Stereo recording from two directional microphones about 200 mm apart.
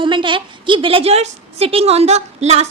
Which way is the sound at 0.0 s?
25° right (ahead or behind).